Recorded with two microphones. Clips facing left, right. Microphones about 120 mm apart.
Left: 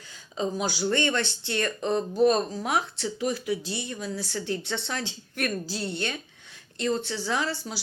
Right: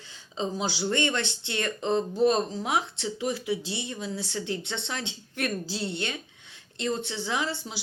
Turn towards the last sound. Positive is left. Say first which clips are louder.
# left 2 dB
turn(degrees=-20)  # may be behind; listen again after turning